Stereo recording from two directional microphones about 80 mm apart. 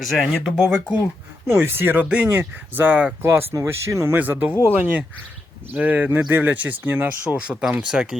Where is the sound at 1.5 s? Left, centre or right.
Right.